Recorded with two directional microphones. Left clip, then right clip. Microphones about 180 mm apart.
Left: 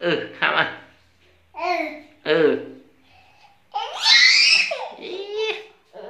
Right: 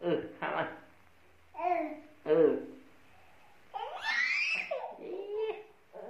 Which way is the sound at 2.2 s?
15° left (ahead or behind).